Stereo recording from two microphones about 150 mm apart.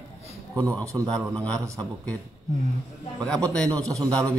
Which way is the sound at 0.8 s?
20° right (ahead or behind).